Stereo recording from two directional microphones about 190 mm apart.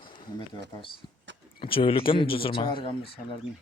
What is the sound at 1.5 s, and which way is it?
A man's voice, 30° left (ahead or behind).